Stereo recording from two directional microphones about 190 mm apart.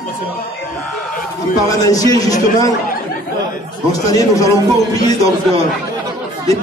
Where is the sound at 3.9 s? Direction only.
20° left (ahead or behind).